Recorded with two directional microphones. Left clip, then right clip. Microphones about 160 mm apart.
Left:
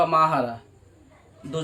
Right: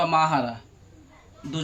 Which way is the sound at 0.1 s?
20° left (ahead or behind).